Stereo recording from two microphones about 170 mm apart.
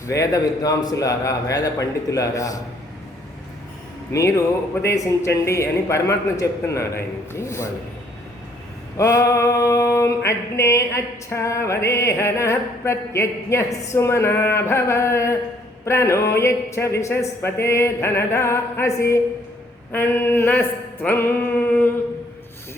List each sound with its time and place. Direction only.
0.1 s a man's voice: 20° left (ahead or behind)
4.1 s male singing: 15° left (ahead or behind)
9.0 s male singing: 20° left (ahead or behind)